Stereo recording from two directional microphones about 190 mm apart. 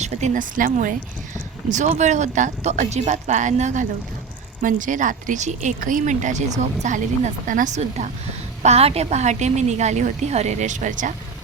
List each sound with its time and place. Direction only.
0.0 s a woman's voice: 35° right (ahead or behind)